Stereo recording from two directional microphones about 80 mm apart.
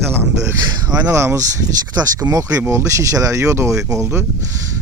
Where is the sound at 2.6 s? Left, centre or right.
Right.